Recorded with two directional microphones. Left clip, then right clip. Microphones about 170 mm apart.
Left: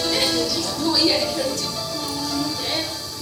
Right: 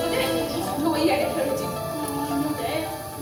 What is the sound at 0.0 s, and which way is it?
Music, 45° right (ahead or behind).